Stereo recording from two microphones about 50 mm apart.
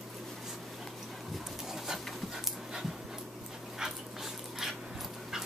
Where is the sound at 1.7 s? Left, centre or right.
Centre.